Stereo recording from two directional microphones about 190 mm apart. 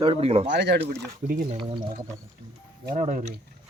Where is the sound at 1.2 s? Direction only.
55° right (ahead or behind).